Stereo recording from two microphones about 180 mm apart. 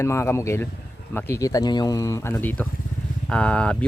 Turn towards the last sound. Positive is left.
turn(degrees=5)  # may be behind; listen again after turning